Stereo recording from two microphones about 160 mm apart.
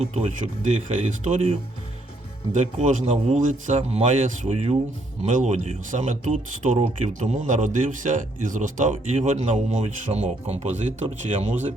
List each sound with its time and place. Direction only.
0.0 s speech: 45° right (ahead or behind)